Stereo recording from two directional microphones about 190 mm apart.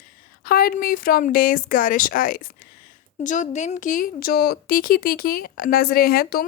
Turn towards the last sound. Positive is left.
turn(degrees=55)  # may be behind; listen again after turning